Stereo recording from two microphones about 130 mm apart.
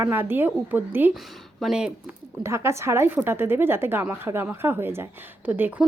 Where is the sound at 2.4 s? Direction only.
20° right (ahead or behind).